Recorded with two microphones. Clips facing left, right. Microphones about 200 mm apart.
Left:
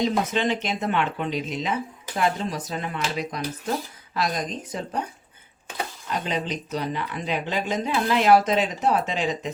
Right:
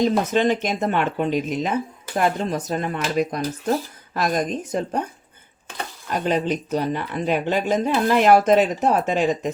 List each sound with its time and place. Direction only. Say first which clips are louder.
0.0 s speech: right 5 dB; 45° right (ahead or behind)
6.2 s speech: right 10 dB; 50° right (ahead or behind)